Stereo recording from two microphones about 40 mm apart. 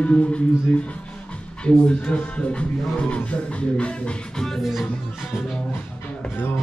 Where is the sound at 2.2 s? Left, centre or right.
Left.